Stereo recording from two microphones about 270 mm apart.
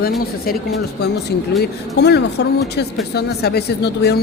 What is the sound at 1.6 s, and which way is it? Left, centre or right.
Speech, left.